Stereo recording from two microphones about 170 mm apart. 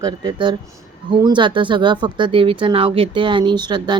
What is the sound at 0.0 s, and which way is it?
Speech, 25° right (ahead or behind).